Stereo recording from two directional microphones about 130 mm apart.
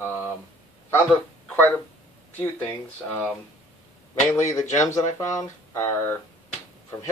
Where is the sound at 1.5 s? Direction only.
15° left (ahead or behind).